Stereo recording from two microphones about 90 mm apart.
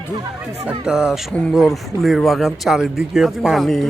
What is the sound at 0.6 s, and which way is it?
A man's voice, 10° right (ahead or behind).